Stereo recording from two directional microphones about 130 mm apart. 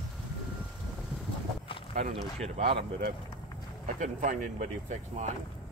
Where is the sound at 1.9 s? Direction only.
60° right (ahead or behind).